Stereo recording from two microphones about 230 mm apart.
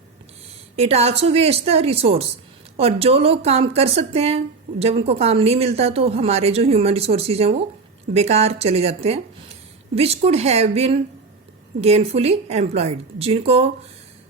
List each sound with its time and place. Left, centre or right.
0.8 s a woman's voice: right